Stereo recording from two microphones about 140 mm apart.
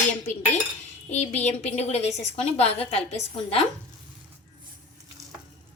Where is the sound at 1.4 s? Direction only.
50° left (ahead or behind).